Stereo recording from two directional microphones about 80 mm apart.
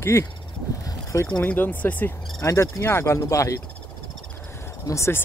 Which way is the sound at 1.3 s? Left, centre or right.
Centre.